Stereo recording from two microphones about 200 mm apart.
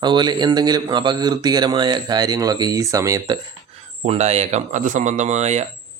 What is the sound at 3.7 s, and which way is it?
Speech, 30° right (ahead or behind).